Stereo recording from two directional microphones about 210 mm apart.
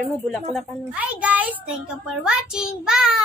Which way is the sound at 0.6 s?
5° right (ahead or behind).